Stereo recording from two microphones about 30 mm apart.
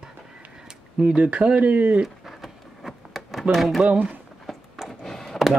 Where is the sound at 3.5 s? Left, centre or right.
Centre.